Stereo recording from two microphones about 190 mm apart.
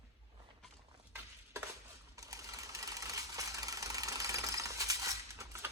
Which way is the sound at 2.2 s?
15° right (ahead or behind).